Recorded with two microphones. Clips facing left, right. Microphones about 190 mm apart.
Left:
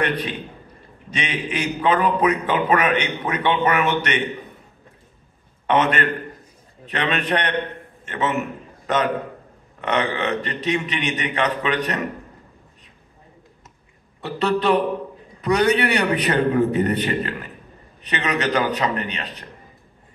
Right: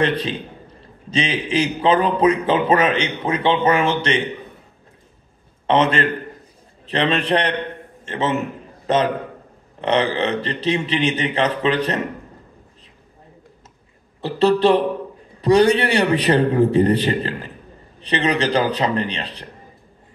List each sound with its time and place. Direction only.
0.0 s a man's voice: 25° right (ahead or behind)
5.7 s a man's voice: 30° right (ahead or behind)
14.2 s a man's voice: 30° right (ahead or behind)